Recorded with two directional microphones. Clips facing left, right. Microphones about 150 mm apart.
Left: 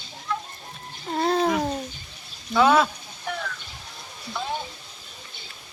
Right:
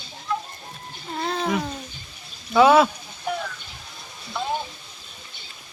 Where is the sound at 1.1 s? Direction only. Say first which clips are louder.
Left 5 dB; 40° left (ahead or behind).